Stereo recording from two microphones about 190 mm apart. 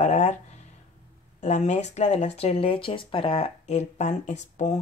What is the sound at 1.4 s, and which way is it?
Speech, 40° left (ahead or behind).